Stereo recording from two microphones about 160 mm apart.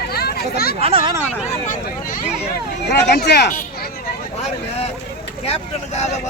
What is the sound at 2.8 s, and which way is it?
Speech, 90° left.